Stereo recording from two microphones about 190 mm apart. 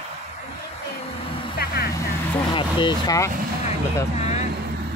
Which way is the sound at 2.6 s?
25° left (ahead or behind).